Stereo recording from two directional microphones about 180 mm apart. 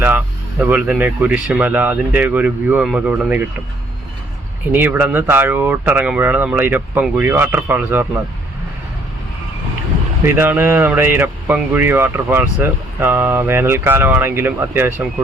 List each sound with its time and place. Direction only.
0.6 s speech: 10° right (ahead or behind)
4.7 s speech: 10° right (ahead or behind)
10.2 s speech: 10° right (ahead or behind)